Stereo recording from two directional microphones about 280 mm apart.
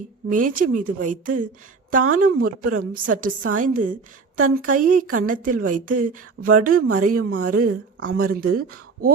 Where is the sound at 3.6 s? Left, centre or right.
Right.